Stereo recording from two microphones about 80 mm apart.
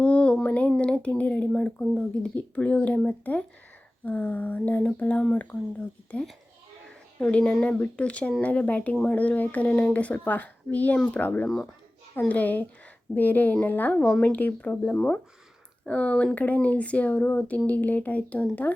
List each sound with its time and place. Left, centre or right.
0.0 s a sound: centre
0.8 s speech: centre
11.4 s speech: centre
12.3 s speech: left